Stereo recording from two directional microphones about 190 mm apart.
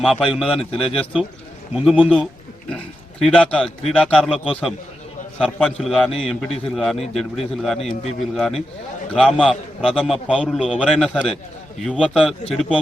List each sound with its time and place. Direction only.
0.0 s a man's voice: centre (ahead or behind)
0.6 s speech: 30° left (ahead or behind)
1.7 s a man's voice: centre (ahead or behind)